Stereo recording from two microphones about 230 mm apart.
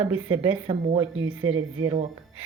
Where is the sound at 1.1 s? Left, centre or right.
Right.